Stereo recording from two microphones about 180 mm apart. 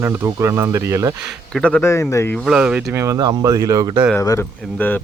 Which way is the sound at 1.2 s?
5° left (ahead or behind).